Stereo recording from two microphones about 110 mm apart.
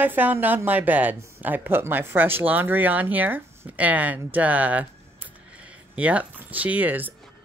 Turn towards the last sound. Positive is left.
turn(degrees=-15)  # may be behind; listen again after turning